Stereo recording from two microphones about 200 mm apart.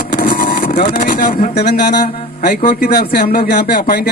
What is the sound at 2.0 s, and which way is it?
A man's voice, 40° left (ahead or behind).